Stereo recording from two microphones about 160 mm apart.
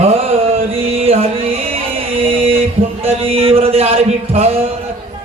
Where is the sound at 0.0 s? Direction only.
40° right (ahead or behind).